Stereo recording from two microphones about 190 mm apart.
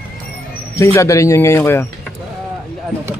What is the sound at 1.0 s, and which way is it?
Speech, 15° left (ahead or behind).